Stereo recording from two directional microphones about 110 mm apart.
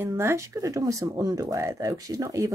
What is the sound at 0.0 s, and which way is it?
Speech, 25° right (ahead or behind).